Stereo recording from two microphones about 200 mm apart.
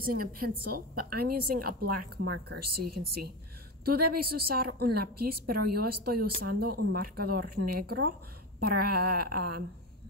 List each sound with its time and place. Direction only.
0.0 s a woman's voice: 45° right (ahead or behind)